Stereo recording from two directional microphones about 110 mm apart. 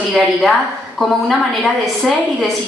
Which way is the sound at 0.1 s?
Centre (ahead or behind).